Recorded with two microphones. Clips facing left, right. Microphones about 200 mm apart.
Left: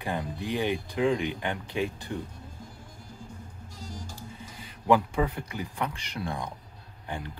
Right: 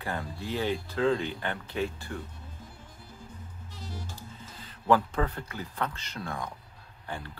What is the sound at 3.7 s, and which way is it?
Music, 15° left (ahead or behind).